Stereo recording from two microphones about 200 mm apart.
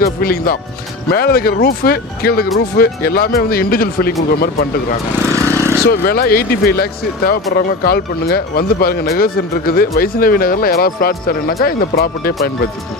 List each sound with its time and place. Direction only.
0.0 s speech: 45° left (ahead or behind)
5.3 s vehicle: 15° right (ahead or behind)
5.9 s speech: 50° left (ahead or behind)